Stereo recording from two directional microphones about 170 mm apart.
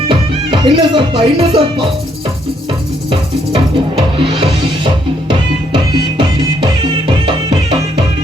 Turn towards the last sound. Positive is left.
turn(degrees=-30)  # may be behind; listen again after turning